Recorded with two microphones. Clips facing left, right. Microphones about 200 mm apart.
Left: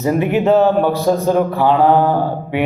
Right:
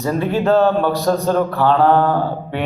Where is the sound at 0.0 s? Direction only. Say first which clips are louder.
Left 3 dB; 15° left (ahead or behind).